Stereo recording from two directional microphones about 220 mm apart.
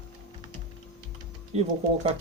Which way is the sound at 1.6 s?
30° right (ahead or behind).